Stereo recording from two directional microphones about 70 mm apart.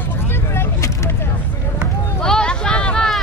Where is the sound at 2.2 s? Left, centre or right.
Centre.